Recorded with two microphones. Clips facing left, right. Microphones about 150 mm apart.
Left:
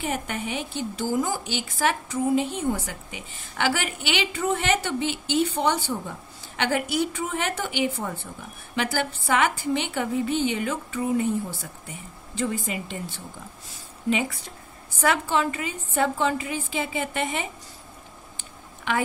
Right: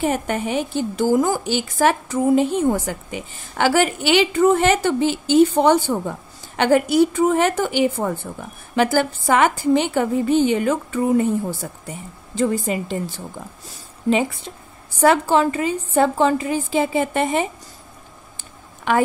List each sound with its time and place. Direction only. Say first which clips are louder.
0.0 s a woman's voice: right 8 dB; 45° right (ahead or behind)
14.1 s speech: right 7 dB; 25° right (ahead or behind)
15.0 s a woman's voice: right 8 dB; 35° right (ahead or behind)